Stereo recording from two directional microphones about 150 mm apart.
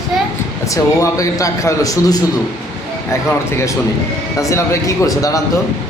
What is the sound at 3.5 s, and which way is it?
A man's voice, 15° left (ahead or behind).